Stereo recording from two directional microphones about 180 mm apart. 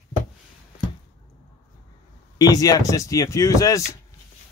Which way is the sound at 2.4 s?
20° left (ahead or behind).